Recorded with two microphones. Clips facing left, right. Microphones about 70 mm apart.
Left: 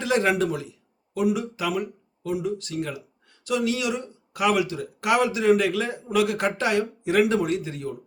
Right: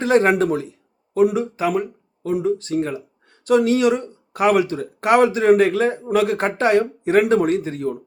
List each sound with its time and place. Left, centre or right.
0.0 s speech: right